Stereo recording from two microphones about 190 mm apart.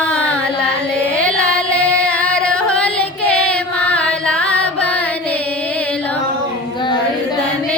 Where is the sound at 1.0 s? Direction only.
5° left (ahead or behind).